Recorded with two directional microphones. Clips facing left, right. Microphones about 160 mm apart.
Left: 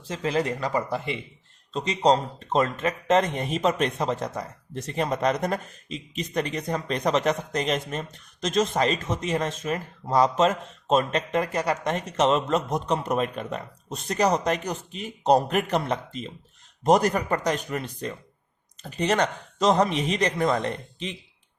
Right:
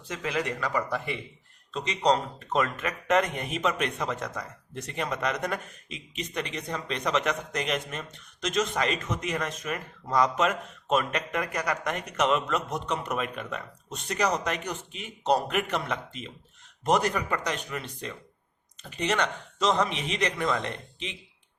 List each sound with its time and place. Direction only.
0.1 s speech: 30° left (ahead or behind)